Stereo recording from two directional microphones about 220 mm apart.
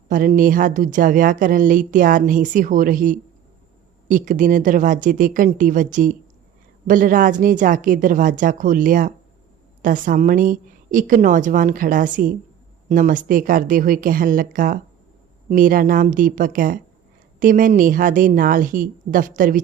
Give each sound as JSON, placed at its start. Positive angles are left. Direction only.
{"t": 0.1, "sound": "speech", "side_deg": -40}